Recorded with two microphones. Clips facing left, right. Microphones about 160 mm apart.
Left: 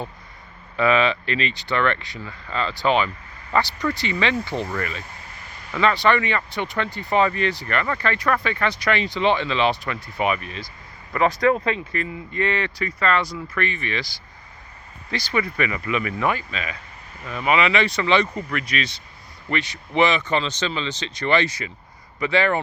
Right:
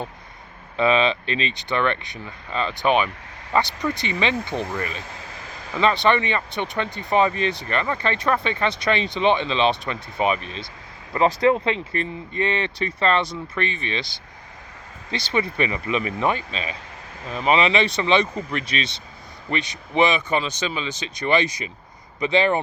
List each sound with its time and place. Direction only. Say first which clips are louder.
0.8 s speech: even; 20° right (ahead or behind)
5.3 s a sound: right 4 dB; 90° right
5.7 s speech: even; 20° right (ahead or behind)